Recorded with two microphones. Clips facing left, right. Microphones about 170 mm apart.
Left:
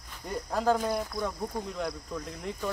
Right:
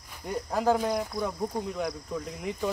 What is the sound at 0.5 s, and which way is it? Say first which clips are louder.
Speech: right 1 dB; 10° right (ahead or behind).